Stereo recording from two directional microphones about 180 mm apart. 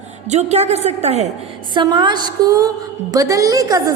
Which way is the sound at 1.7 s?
25° right (ahead or behind).